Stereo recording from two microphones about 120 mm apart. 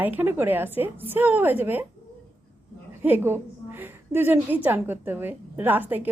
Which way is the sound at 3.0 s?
15° right (ahead or behind).